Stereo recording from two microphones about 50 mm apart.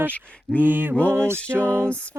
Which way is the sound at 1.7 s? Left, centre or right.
Right.